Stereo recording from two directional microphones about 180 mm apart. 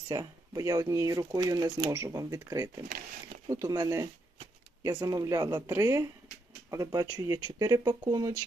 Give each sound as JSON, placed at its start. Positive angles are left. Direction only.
{"t": 0.1, "sound": "speech", "side_deg": -20}